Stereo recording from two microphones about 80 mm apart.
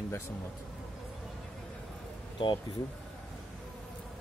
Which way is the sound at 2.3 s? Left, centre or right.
Left.